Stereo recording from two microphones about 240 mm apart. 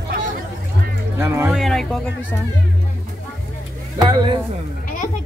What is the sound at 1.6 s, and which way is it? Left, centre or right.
Speech, centre.